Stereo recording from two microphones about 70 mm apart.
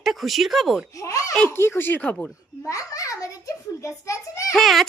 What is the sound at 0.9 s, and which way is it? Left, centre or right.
Speech, left.